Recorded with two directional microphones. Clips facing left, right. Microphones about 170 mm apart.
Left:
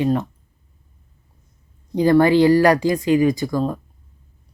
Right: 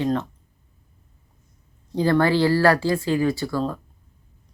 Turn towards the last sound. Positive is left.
turn(degrees=15)  # may be behind; listen again after turning